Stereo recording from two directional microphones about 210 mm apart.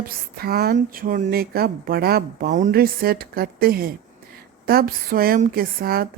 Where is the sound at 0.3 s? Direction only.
45° right (ahead or behind).